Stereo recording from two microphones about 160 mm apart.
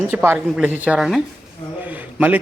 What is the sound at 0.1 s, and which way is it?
A man's voice, 15° right (ahead or behind).